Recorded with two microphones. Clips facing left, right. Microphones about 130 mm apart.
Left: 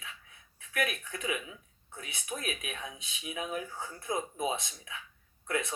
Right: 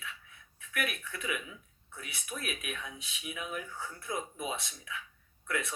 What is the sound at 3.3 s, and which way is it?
Speech, 35° left (ahead or behind).